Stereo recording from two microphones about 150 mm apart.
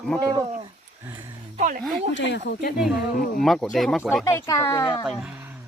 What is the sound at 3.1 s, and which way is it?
Speech, 75° left (ahead or behind).